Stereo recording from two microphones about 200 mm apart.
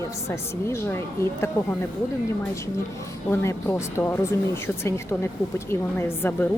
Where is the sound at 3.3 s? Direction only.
10° left (ahead or behind).